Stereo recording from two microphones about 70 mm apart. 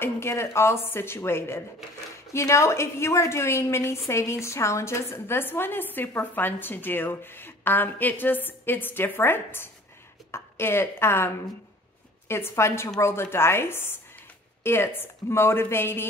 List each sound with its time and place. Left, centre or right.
0.0 s a woman's voice: left